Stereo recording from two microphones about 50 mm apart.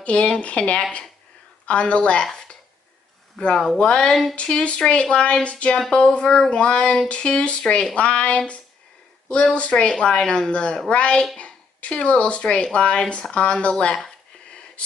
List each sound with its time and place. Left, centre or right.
0.0 s a woman's voice: left
3.3 s a woman's voice: centre